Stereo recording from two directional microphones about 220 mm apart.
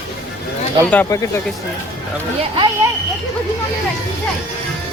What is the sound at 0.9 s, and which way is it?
Speech, 5° left (ahead or behind).